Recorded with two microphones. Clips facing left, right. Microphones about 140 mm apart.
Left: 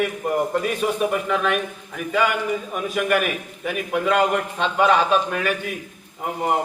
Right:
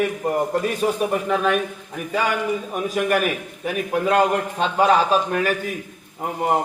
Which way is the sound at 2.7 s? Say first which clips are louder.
Right 1 dB; 35° right (ahead or behind).